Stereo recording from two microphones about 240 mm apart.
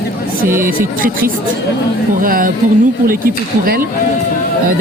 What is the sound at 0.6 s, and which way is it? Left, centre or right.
Speech, right.